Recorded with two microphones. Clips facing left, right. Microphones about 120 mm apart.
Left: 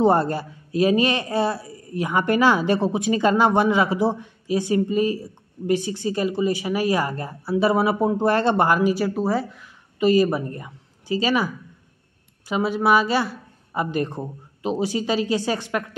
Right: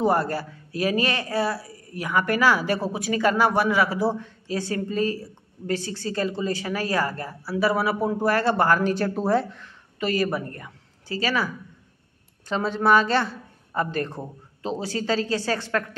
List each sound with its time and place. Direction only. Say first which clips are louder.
0.0 s a woman's voice: left 4 dB; 25° left (ahead or behind); by 9.7 s 5° left (ahead or behind)
9.9 s a woman's voice: left 6 dB; 15° left (ahead or behind)